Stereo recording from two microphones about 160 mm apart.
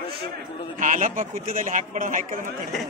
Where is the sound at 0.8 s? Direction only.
55° right (ahead or behind).